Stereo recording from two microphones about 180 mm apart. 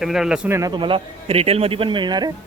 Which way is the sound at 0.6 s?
25° right (ahead or behind).